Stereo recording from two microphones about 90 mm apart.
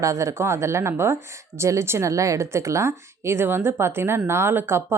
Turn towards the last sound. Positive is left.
turn(degrees=-25)  # may be behind; listen again after turning